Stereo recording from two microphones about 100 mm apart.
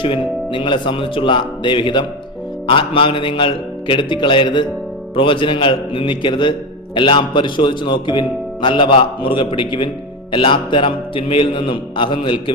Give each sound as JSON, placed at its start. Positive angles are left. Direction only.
{"t": 0.0, "sound": "speech", "side_deg": 60}